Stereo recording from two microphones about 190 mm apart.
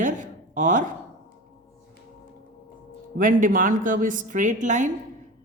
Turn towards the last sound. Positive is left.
turn(degrees=-40)  # may be behind; listen again after turning